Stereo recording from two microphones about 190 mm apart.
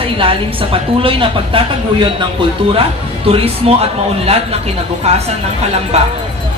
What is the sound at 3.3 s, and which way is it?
Speech, 30° right (ahead or behind).